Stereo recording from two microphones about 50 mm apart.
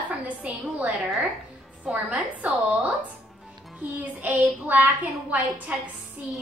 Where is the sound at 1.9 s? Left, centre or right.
Right.